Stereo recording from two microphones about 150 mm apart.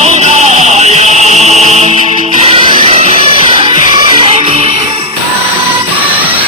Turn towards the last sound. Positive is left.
turn(degrees=-40)  # may be behind; listen again after turning